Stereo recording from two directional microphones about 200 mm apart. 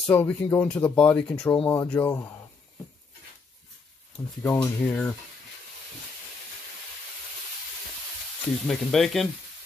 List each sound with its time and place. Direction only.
0.0 s speech: 10° left (ahead or behind)
4.4 s speech: 5° left (ahead or behind)
8.6 s speech: centre (ahead or behind)